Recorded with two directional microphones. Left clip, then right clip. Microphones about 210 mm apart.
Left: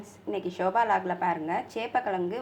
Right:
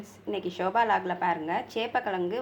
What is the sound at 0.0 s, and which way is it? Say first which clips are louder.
A woman's voice: even; 5° left (ahead or behind).